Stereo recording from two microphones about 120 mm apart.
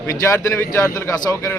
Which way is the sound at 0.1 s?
25° left (ahead or behind).